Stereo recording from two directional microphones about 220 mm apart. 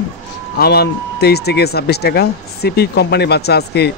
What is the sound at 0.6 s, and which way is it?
Speech, 45° left (ahead or behind).